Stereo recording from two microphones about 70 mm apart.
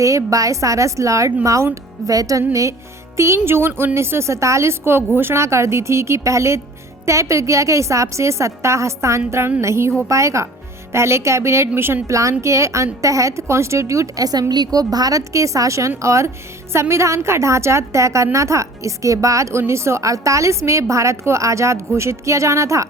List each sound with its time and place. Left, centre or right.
0.0 s a woman's voice: right
12.0 s a woman's voice: right